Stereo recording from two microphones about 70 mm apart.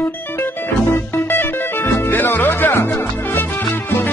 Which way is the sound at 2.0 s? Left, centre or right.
Left.